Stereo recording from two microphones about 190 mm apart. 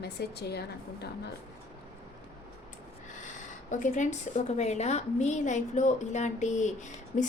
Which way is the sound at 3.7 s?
40° left (ahead or behind).